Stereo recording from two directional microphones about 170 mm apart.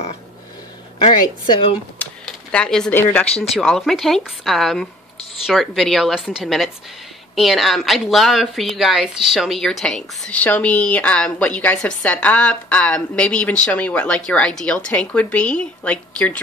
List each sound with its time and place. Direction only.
1.0 s speech: 30° left (ahead or behind)
2.5 s a woman's voice: 5° left (ahead or behind)